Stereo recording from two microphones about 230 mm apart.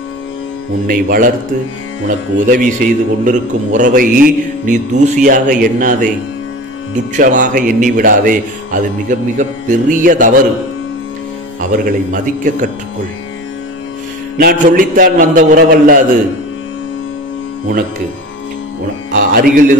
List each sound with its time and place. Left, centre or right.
0.8 s a man's voice: right
7.2 s a man's voice: right
11.7 s a man's voice: right
14.4 s a man's voice: right
19.1 s a man's voice: right